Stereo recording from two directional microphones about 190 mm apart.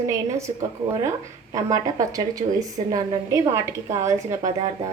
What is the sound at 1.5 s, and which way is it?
A woman's voice, 20° right (ahead or behind).